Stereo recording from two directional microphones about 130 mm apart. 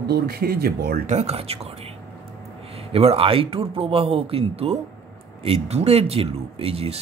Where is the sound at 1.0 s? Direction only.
55° right (ahead or behind).